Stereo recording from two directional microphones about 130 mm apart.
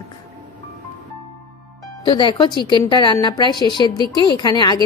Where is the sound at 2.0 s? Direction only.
40° left (ahead or behind).